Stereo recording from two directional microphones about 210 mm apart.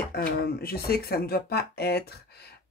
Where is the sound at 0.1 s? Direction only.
45° left (ahead or behind).